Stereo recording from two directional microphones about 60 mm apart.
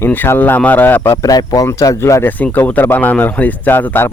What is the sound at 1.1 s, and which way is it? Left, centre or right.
Speech, left.